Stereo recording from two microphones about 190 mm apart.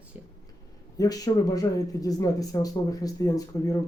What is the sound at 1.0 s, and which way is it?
Speech, 20° left (ahead or behind).